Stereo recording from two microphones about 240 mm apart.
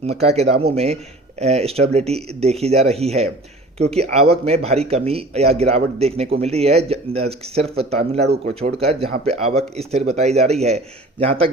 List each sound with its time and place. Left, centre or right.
0.0 s speech: right